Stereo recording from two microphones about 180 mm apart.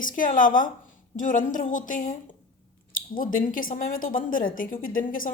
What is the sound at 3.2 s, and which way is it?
A woman's voice, 50° left (ahead or behind).